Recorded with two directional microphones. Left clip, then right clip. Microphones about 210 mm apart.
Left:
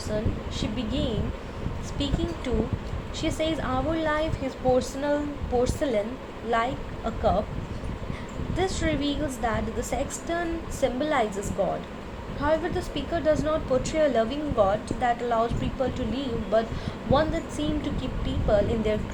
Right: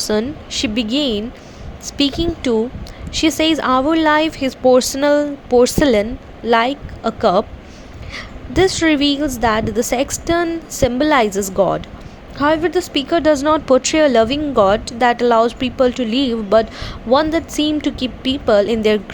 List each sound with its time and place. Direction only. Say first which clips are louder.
0.1 s a woman's voice: right 8 dB; 45° right (ahead or behind)
2.2 s a woman's voice: right 12 dB; 40° right (ahead or behind)
12.4 s speech: right 10 dB; 45° right (ahead or behind)